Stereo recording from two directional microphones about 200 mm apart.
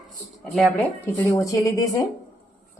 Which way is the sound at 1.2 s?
15° left (ahead or behind).